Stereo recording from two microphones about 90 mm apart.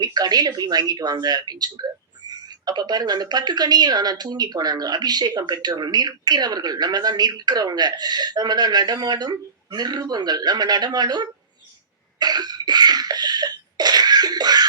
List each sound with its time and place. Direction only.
0.0 s speech: 50° right (ahead or behind)
12.2 s cough: 50° right (ahead or behind)